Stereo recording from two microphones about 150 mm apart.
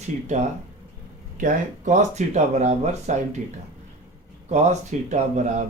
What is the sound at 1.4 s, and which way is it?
Speech, 60° right (ahead or behind).